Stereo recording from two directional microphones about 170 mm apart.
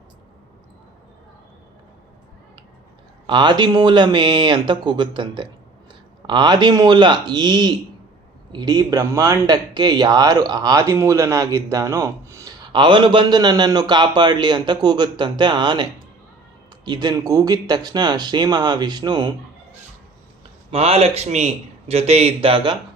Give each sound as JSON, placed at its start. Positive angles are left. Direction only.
{"t": 3.2, "sound": "speech", "side_deg": -25}
{"t": 20.7, "sound": "speech", "side_deg": -35}